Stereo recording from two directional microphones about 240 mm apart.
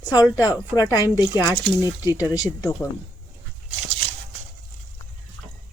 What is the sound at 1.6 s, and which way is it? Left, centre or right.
Speech, centre.